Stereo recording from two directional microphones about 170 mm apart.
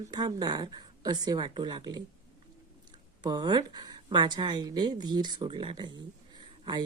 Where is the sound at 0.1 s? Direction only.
25° right (ahead or behind).